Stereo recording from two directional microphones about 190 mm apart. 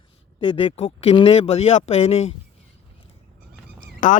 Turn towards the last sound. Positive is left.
turn(degrees=40)  # may be behind; listen again after turning